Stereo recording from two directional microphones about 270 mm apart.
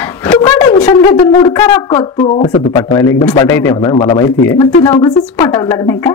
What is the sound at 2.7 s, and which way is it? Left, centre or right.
A woman's voice, centre.